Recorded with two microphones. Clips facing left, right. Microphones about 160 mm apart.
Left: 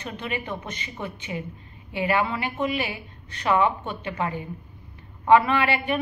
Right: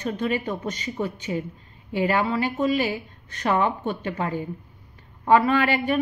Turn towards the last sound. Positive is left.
turn(degrees=-45)  # may be behind; listen again after turning